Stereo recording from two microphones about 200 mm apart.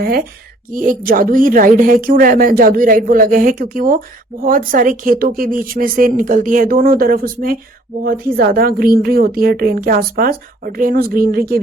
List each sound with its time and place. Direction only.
0.0 s speech: 50° right (ahead or behind)